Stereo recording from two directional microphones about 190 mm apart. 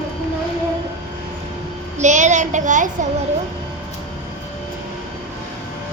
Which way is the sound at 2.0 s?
40° right (ahead or behind).